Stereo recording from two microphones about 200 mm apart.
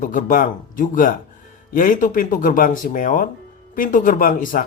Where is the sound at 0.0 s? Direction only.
40° left (ahead or behind).